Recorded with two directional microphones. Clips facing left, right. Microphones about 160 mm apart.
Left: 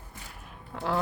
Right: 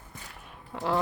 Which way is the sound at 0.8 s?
Centre (ahead or behind).